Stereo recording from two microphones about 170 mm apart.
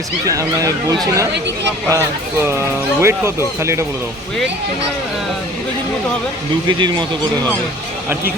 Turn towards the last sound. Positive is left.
turn(degrees=-25)  # may be behind; listen again after turning